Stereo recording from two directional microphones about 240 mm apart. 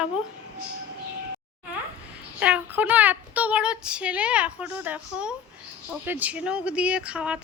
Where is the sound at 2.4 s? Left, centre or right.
Centre.